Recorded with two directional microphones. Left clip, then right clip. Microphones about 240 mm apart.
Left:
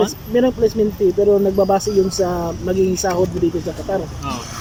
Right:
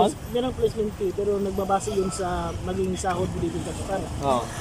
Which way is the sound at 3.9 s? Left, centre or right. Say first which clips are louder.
Left 8 dB; left.